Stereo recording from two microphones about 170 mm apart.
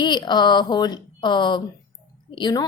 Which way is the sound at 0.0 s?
25° left (ahead or behind).